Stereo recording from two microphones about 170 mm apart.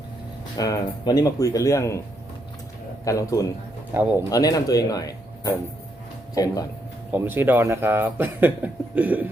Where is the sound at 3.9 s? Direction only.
10° right (ahead or behind).